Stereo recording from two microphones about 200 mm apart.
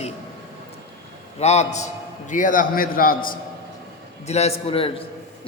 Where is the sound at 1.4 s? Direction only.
35° left (ahead or behind).